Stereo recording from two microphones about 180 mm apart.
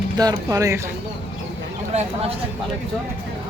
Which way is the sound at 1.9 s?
35° right (ahead or behind).